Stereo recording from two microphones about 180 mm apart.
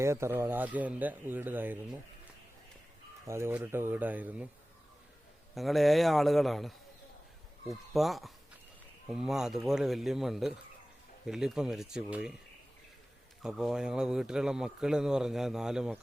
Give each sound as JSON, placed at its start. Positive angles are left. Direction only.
{"t": 0.0, "sound": "speech", "side_deg": -15}
{"t": 3.2, "sound": "speech", "side_deg": -15}
{"t": 5.5, "sound": "speech", "side_deg": 0}
{"t": 13.4, "sound": "speech", "side_deg": -5}